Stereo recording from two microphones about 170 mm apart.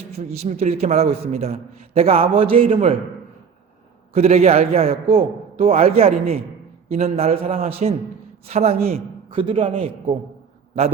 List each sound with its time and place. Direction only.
0.2 s a man's voice: 40° right (ahead or behind)
4.1 s a man's voice: 40° right (ahead or behind)